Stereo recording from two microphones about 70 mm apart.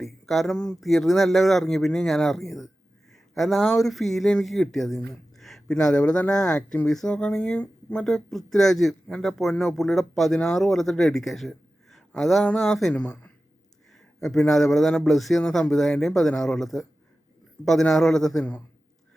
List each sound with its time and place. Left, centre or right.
0.0 s a man's voice: centre
3.1 s a sound: centre
3.8 s a man's voice: centre
5.4 s a sound: centre
5.8 s speech: centre
8.0 s a man's voice: centre
13.9 s a man's voice: centre